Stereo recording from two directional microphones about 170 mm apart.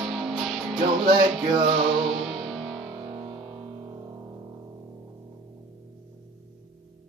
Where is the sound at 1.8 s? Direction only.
Centre (ahead or behind).